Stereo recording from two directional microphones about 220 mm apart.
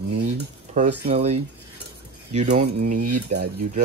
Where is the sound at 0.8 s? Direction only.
30° right (ahead or behind).